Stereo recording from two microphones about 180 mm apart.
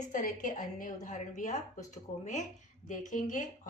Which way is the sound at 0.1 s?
45° left (ahead or behind).